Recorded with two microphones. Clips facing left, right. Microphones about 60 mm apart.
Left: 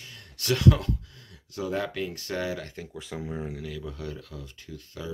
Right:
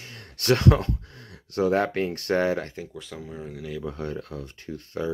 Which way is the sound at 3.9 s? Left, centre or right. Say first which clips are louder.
Right 6 dB; right.